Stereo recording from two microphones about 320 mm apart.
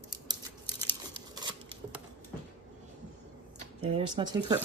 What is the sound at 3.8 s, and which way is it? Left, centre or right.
Speech, centre.